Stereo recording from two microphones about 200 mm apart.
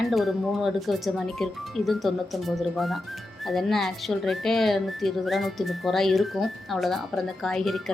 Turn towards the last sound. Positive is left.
turn(degrees=0)  # may be behind; listen again after turning